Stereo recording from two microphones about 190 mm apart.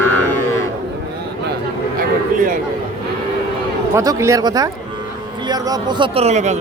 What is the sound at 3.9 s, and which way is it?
Speech, 15° right (ahead or behind).